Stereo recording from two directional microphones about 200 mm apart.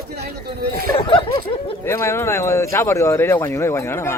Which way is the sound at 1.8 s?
15° left (ahead or behind).